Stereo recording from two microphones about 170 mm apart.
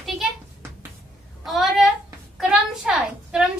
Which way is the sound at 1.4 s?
Centre (ahead or behind).